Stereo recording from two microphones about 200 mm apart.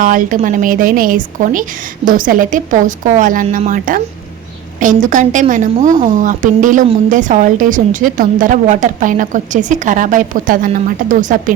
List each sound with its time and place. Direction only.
0.0 s a woman's voice: 40° right (ahead or behind)